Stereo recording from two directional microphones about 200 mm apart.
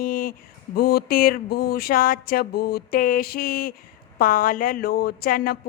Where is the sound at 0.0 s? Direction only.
45° left (ahead or behind).